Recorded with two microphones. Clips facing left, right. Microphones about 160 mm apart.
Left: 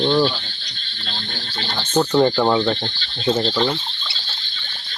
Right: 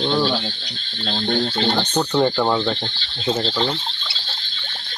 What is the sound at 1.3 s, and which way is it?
Speech, 60° right (ahead or behind).